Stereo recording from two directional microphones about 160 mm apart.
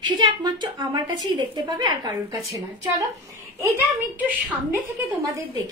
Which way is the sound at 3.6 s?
15° right (ahead or behind).